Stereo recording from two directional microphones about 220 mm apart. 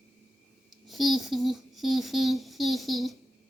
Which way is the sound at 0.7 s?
Centre (ahead or behind).